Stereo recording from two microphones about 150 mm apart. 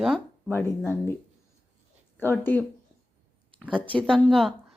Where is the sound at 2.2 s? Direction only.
15° left (ahead or behind).